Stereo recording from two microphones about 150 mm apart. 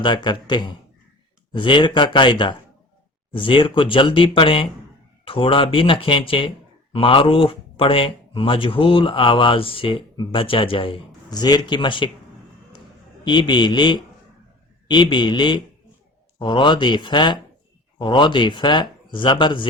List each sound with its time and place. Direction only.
0.0 s speech: 30° left (ahead or behind)
13.2 s speech: 30° left (ahead or behind)